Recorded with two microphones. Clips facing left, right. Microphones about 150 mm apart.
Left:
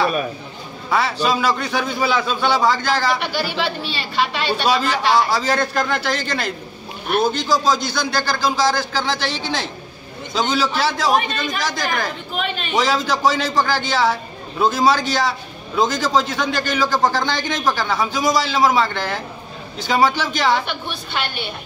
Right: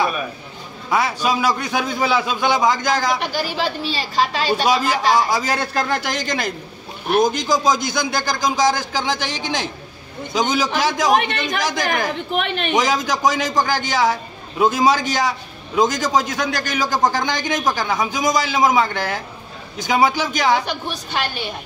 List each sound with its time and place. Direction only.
0.8 s a man's voice: 15° right (ahead or behind)
3.2 s a woman's voice: 40° right (ahead or behind)
4.6 s a man's voice: 10° right (ahead or behind)
12.4 s speech: 60° right (ahead or behind)
12.7 s a man's voice: 15° right (ahead or behind)
20.6 s a woman's voice: 40° right (ahead or behind)